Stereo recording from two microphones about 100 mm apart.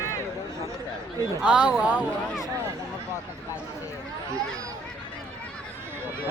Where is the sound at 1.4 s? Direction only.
10° right (ahead or behind).